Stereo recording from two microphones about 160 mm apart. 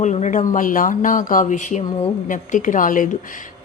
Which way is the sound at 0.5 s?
60° left (ahead or behind).